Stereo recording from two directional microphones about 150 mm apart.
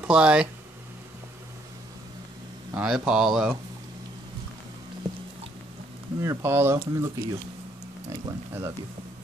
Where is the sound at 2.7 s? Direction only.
5° right (ahead or behind).